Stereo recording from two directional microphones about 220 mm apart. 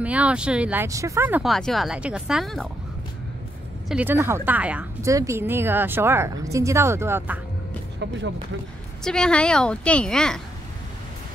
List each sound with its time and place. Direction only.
0.0 s speech: 5° right (ahead or behind)
3.9 s a woman's voice: 10° right (ahead or behind)
8.0 s speech: 55° right (ahead or behind)
9.0 s speech: 5° left (ahead or behind)